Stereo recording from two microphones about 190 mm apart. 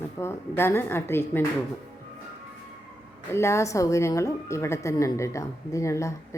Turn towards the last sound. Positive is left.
turn(degrees=15)  # may be behind; listen again after turning